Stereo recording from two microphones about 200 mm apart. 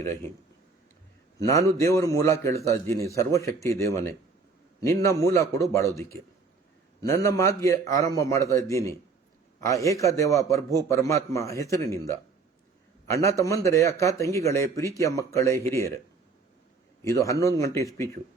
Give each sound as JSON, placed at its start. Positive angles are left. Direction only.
{"t": 1.4, "sound": "a man's voice", "side_deg": 15}
{"t": 17.0, "sound": "a man's voice", "side_deg": 15}